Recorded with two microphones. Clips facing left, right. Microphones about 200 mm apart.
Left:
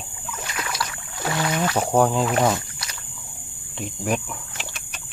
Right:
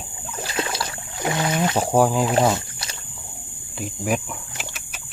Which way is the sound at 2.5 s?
25° right (ahead or behind).